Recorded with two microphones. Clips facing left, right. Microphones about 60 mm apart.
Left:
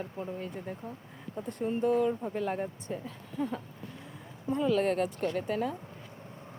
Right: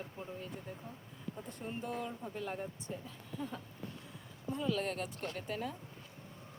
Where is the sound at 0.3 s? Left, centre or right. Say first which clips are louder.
Left 7 dB; left.